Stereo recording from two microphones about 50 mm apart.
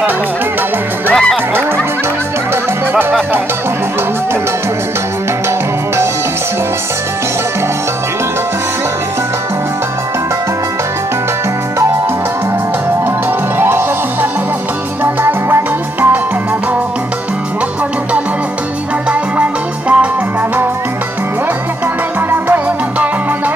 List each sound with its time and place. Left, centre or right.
2.9 s music: right
13.6 s music: right
19.0 s music: right